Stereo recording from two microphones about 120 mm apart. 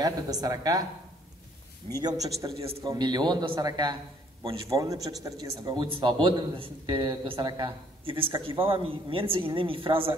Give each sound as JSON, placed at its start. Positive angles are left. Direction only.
{"t": 0.0, "sound": "a woman's voice", "side_deg": -30}
{"t": 2.0, "sound": "a woman's voice", "side_deg": -30}